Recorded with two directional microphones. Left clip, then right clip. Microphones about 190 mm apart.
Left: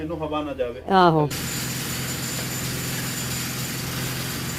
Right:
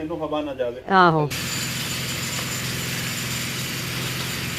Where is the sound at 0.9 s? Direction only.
25° left (ahead or behind).